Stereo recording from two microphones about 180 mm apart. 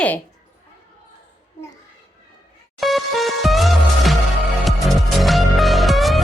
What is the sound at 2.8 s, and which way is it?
Music, centre (ahead or behind).